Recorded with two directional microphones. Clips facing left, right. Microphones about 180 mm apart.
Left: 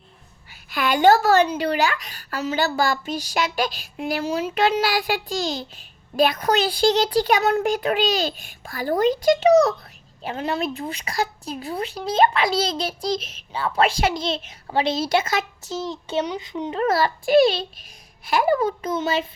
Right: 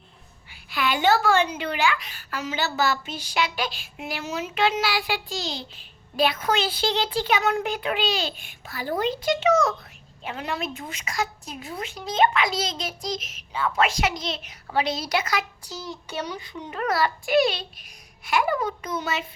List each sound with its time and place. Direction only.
0.5 s a child's voice: 45° left (ahead or behind); by 19.2 s 30° left (ahead or behind)